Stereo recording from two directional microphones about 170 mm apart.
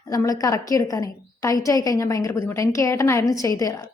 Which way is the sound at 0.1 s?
20° left (ahead or behind).